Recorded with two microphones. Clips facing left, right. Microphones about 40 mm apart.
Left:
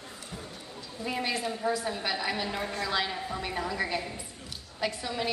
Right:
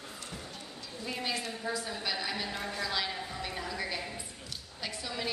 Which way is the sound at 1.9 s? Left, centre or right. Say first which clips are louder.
Left 4 dB; left.